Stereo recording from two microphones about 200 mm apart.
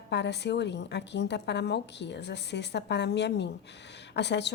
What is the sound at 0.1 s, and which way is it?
A woman's voice, 60° left (ahead or behind).